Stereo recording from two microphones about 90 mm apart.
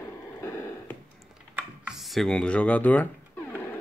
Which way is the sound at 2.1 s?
5° left (ahead or behind).